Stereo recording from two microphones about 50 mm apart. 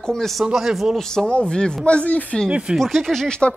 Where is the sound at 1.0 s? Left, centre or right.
Centre; by 2.4 s left.